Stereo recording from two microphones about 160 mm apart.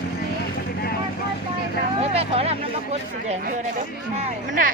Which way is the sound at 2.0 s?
40° right (ahead or behind).